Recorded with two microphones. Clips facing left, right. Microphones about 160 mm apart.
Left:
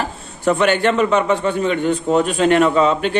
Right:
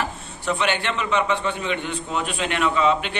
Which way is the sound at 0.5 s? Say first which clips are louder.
Left 8 dB; 50° left (ahead or behind).